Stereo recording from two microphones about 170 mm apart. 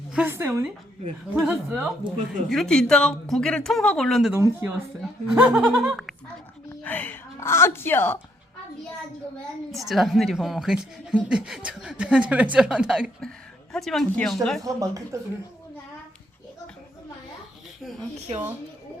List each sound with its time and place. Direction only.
0.1 s a woman's voice: 10° right (ahead or behind)
4.3 s a woman's voice: 10° right (ahead or behind)
6.8 s speech: 10° left (ahead or behind)
9.7 s a woman's voice: centre (ahead or behind)
14.6 s speech: 20° right (ahead or behind)